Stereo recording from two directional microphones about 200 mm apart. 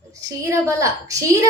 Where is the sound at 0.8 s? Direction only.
15° right (ahead or behind).